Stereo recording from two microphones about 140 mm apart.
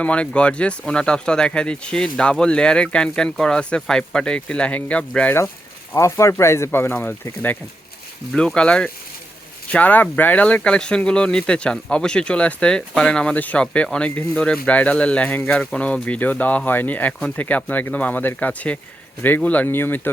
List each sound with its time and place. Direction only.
0.0 s speech: 10° left (ahead or behind)